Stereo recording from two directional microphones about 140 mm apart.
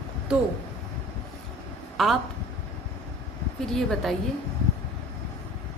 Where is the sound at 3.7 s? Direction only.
5° left (ahead or behind).